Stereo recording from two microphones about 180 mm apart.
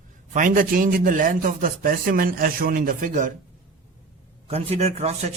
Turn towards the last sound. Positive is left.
turn(degrees=-35)  # may be behind; listen again after turning